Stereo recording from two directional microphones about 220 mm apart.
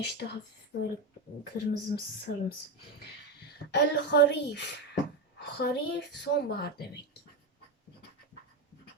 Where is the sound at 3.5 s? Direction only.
50° left (ahead or behind).